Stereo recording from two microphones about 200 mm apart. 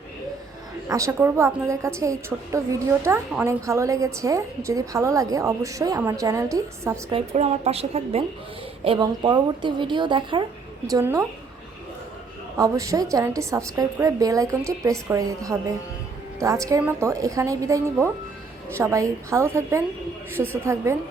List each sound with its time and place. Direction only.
0.9 s a woman's voice: 15° right (ahead or behind)
7.1 s a woman's voice: 30° right (ahead or behind)
12.5 s a woman's voice: 15° right (ahead or behind)